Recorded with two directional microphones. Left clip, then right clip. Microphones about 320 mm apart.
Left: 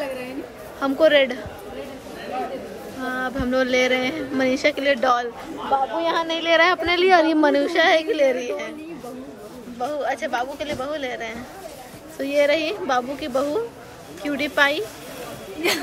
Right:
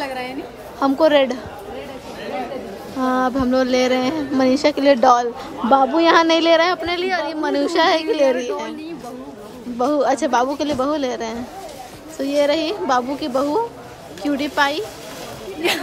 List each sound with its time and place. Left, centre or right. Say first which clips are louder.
0.7 s speech: right 2 dB; centre
3.1 s speech: right 6 dB; centre
6.0 s speech: right 9 dB; centre
6.5 s a woman's voice: right 1 dB; centre
9.8 s a woman's voice: right 7 dB; centre